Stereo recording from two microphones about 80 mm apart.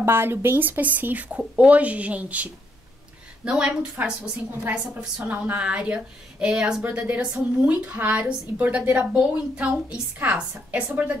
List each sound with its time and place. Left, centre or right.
0.0 s a woman's voice: right; by 6.8 s centre
6.8 s a woman's voice: right